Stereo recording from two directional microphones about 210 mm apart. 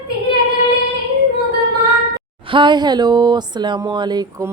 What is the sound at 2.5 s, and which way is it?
Speech, 20° right (ahead or behind).